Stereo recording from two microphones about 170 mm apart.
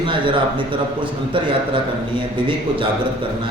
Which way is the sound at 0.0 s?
30° right (ahead or behind).